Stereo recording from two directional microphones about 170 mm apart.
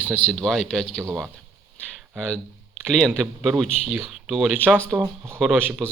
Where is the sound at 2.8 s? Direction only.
Centre (ahead or behind).